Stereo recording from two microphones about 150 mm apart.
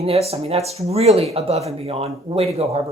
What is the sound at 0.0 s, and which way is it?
Speech, 45° right (ahead or behind).